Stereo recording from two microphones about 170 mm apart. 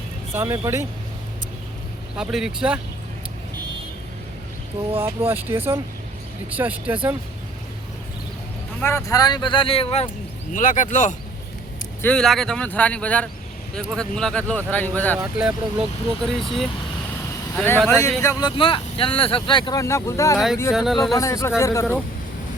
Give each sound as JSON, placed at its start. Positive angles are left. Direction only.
{"t": 0.3, "sound": "speech", "side_deg": -20}
{"t": 2.1, "sound": "speech", "side_deg": -5}
{"t": 4.9, "sound": "speech", "side_deg": -15}
{"t": 8.8, "sound": "speech", "side_deg": 15}
{"t": 10.5, "sound": "speech", "side_deg": 50}
{"t": 12.0, "sound": "speech", "side_deg": 5}
{"t": 16.2, "sound": "speech", "side_deg": 0}
{"t": 20.7, "sound": "speech", "side_deg": 0}
{"t": 21.1, "sound": "speech", "side_deg": 20}